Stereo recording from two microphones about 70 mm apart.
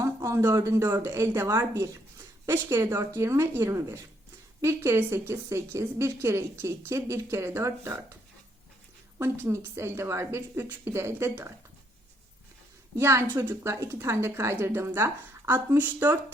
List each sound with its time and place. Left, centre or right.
0.0 s a sound: right
0.6 s a woman's voice: right
13.0 s a woman's voice: right